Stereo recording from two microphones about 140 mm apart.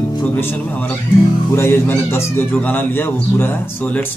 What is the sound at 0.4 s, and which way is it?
A man's voice, 15° left (ahead or behind).